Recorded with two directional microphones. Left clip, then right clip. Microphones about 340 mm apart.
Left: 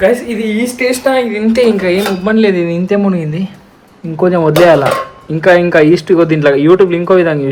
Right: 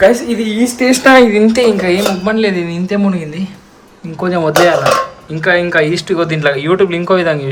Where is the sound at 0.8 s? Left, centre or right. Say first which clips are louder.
Right 6 dB; centre.